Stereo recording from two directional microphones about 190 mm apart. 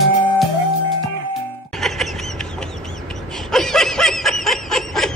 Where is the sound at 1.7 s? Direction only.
Centre (ahead or behind).